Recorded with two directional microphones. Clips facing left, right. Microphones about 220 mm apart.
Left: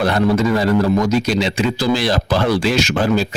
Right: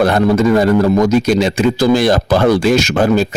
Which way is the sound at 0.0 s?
50° right (ahead or behind).